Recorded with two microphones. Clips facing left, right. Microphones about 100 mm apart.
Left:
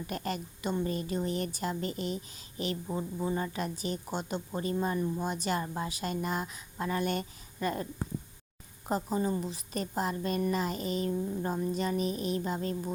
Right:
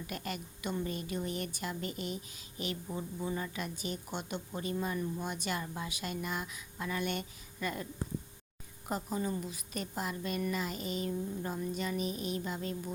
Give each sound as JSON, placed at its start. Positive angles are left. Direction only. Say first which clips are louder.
{"t": 0.1, "sound": "a woman's voice", "louder": "left 6 dB", "side_deg": 35}
{"t": 8.9, "sound": "a woman's voice", "louder": "left 5 dB", "side_deg": 35}